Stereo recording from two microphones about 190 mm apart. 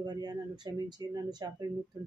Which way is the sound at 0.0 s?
20° right (ahead or behind).